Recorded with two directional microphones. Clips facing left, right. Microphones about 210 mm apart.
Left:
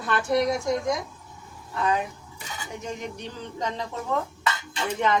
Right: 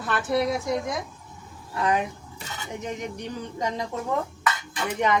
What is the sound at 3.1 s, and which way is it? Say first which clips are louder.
Speech: right 3 dB; 15° right (ahead or behind).